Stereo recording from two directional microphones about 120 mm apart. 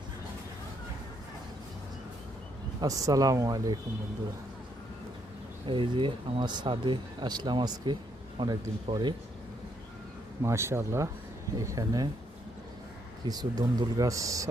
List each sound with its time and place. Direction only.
2.8 s speech: 30° right (ahead or behind)
5.6 s speech: 45° right (ahead or behind)
10.4 s speech: 20° right (ahead or behind)
13.2 s speech: 35° right (ahead or behind)